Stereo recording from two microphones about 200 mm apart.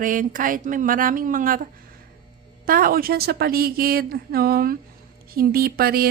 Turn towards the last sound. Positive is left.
turn(degrees=-50)  # may be behind; listen again after turning